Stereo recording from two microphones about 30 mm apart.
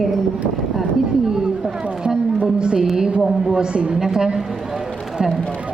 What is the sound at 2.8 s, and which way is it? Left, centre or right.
A woman's voice, centre.